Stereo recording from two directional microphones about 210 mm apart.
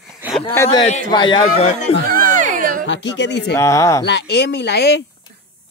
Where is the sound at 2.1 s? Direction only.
40° right (ahead or behind).